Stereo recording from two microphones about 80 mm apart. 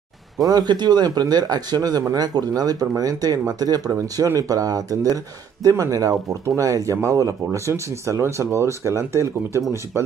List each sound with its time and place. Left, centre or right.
0.4 s speech: right